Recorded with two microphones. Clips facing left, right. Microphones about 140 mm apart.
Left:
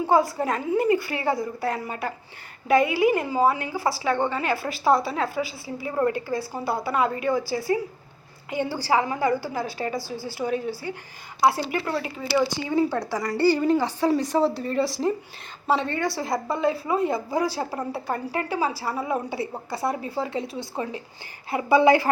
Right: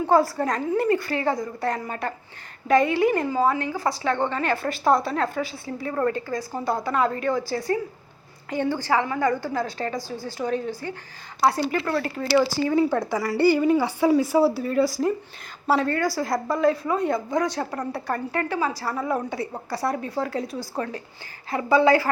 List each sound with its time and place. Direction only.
0.1 s a woman's voice: 5° left (ahead or behind)
5.9 s a woman's voice: 15° left (ahead or behind)
8.9 s speech: 20° left (ahead or behind)
9.2 s a woman's voice: 10° left (ahead or behind)
12.1 s a woman's voice: 5° left (ahead or behind)
18.7 s speech: 25° left (ahead or behind)
18.9 s a woman's voice: 10° left (ahead or behind)
19.8 s speech: 25° left (ahead or behind)
20.1 s speech: centre (ahead or behind)
21.5 s a woman's voice: 15° left (ahead or behind)